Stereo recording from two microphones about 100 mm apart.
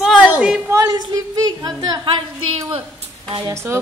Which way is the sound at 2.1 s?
60° right (ahead or behind).